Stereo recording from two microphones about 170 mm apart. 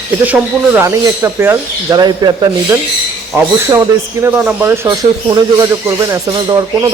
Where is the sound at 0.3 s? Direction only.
15° right (ahead or behind).